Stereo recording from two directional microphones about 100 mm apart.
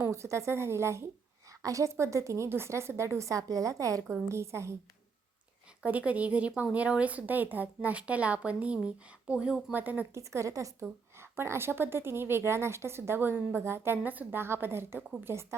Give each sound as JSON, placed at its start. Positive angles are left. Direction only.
{"t": 0.0, "sound": "a woman's voice", "side_deg": -30}
{"t": 5.8, "sound": "speech", "side_deg": -15}
{"t": 10.2, "sound": "a woman's voice", "side_deg": -30}